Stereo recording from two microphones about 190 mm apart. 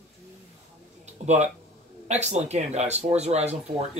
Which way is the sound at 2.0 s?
35° right (ahead or behind).